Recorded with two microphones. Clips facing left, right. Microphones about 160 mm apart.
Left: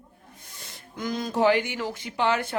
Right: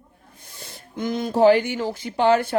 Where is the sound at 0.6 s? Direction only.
30° right (ahead or behind).